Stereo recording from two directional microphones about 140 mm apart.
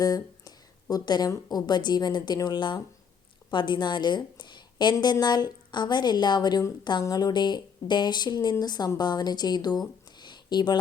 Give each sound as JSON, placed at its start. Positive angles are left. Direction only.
{"t": 0.0, "sound": "a woman's voice", "side_deg": 25}